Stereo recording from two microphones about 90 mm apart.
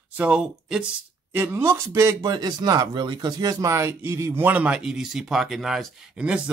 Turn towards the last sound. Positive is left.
turn(degrees=-10)  # may be behind; listen again after turning